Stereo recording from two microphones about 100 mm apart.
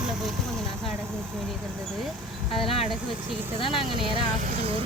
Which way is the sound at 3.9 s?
60° right (ahead or behind).